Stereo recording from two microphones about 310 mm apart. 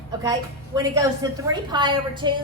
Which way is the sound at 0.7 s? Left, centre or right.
Centre.